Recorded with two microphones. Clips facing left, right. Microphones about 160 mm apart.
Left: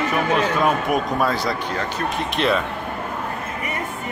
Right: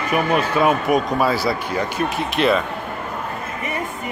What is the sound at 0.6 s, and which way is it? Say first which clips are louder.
Speech: right 3 dB; 5° right (ahead or behind).